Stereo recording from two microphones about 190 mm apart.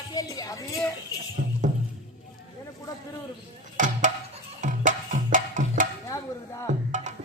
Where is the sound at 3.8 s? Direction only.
40° right (ahead or behind).